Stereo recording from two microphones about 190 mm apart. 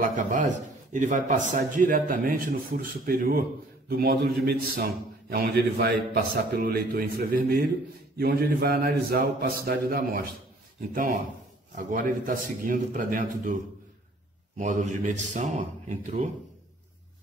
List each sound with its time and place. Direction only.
0.0 s a man's voice: 40° right (ahead or behind)
11.7 s a man's voice: 45° right (ahead or behind)
14.6 s a man's voice: 40° right (ahead or behind)